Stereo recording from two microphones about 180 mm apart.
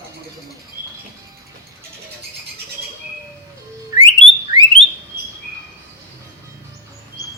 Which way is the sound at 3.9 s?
25° right (ahead or behind).